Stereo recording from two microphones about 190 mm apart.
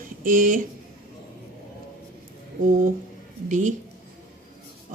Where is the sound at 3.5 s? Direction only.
40° right (ahead or behind).